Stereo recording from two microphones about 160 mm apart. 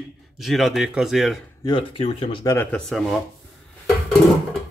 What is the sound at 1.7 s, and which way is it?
Speech, 35° left (ahead or behind).